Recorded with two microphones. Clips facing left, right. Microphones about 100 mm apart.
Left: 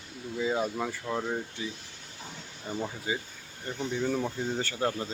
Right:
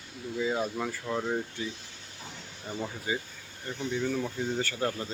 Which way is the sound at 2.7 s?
15° left (ahead or behind).